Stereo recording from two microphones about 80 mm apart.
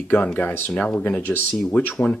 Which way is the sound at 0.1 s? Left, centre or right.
Left.